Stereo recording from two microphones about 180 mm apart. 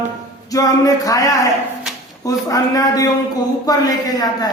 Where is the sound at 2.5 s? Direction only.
20° left (ahead or behind).